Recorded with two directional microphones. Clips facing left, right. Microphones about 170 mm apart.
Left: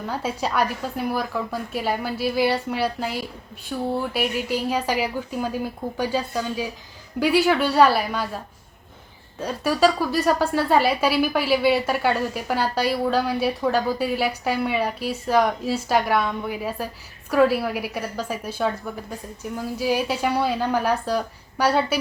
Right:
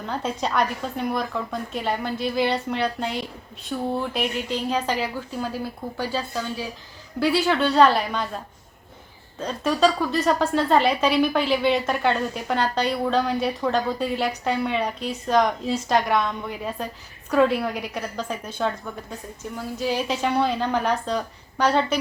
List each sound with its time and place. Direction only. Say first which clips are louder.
0.0 s a woman's voice: even; 5° left (ahead or behind)
9.4 s a woman's voice: left 1 dB; 10° left (ahead or behind)